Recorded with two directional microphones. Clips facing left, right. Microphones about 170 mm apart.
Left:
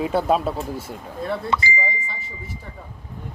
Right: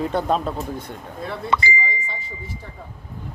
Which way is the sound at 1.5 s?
60° right (ahead or behind).